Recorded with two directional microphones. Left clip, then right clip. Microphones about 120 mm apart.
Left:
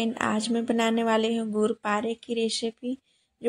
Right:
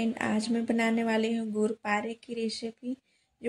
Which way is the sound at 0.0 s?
25° left (ahead or behind).